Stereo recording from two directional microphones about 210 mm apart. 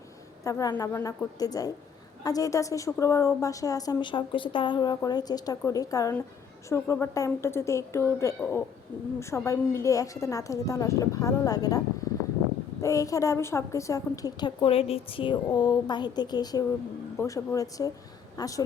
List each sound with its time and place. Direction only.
0.4 s a woman's voice: 15° left (ahead or behind)
12.8 s a woman's voice: 15° left (ahead or behind)